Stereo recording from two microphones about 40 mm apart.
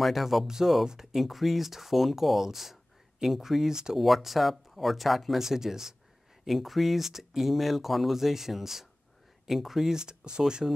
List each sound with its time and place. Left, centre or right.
0.0 s speech: centre
3.9 s speech: centre
9.9 s speech: centre